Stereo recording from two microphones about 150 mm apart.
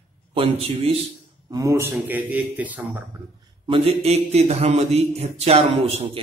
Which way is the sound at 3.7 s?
40° right (ahead or behind).